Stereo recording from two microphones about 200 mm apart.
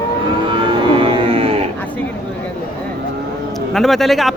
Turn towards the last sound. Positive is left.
turn(degrees=0)  # may be behind; listen again after turning